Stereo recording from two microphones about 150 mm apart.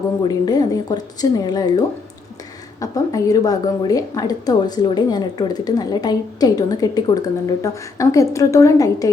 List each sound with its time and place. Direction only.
0.3 s a woman's voice: 25° left (ahead or behind)
2.8 s a woman's voice: 20° left (ahead or behind)